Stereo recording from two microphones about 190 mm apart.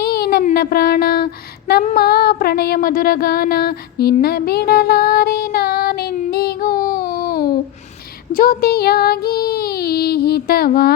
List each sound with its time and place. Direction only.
0.0 s child singing: 55° left (ahead or behind)
1.8 s female singing: 40° left (ahead or behind)
2.0 s a sound: 55° left (ahead or behind)
8.3 s child singing: 50° left (ahead or behind)